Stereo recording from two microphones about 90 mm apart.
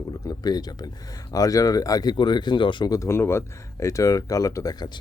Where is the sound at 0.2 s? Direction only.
45° left (ahead or behind); by 2.9 s 65° left (ahead or behind).